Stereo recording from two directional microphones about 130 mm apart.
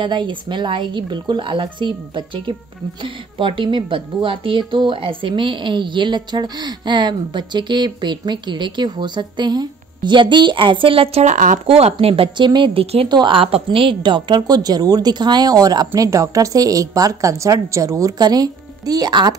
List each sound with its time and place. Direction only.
0.0 s a woman's voice: 35° right (ahead or behind); by 11.3 s 50° right (ahead or behind)
11.3 s speech: 80° right
11.6 s speech: 50° right (ahead or behind)
12.8 s speech: 50° right (ahead or behind)
13.1 s a woman's voice: 40° right (ahead or behind)